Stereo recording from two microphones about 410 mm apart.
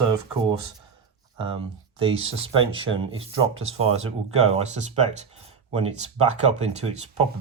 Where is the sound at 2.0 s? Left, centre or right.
Centre.